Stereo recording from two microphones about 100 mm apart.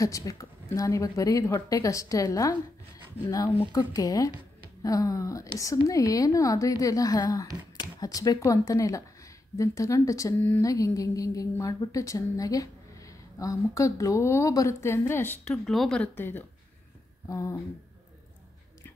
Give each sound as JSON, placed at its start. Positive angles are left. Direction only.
{"t": 0.0, "sound": "a woman's voice", "side_deg": 35}
{"t": 15.4, "sound": "speech", "side_deg": 5}
{"t": 16.0, "sound": "speech", "side_deg": 20}
{"t": 17.3, "sound": "a woman's voice", "side_deg": 30}